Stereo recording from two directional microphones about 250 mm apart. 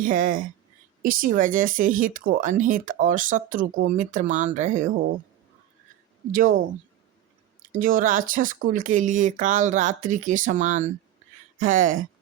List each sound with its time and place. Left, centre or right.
0.0 s speech: right
6.3 s speech: right
7.7 s speech: right